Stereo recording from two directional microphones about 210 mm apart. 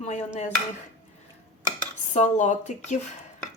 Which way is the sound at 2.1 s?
35° left (ahead or behind).